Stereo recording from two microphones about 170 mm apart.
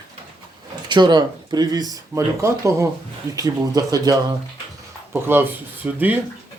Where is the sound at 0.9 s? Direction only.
25° right (ahead or behind); by 6.0 s 10° right (ahead or behind).